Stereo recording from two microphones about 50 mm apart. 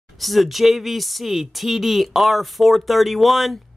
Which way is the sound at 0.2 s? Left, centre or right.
Centre.